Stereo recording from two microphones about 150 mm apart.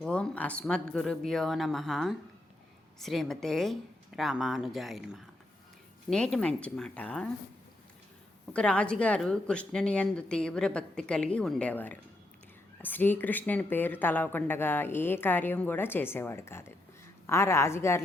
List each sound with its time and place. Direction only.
0.0 s a woman's voice: 5° left (ahead or behind)
8.5 s a woman's voice: 5° left (ahead or behind)